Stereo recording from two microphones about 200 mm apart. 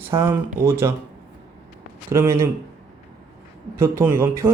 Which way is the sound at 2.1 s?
15° right (ahead or behind).